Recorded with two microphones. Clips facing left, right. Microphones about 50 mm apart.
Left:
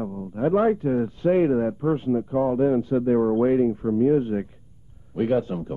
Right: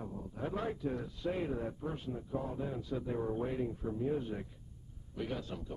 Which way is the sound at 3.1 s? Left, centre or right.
Left.